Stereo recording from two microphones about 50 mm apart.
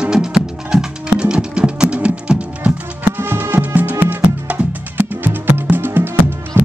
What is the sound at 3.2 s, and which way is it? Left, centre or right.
Music, right.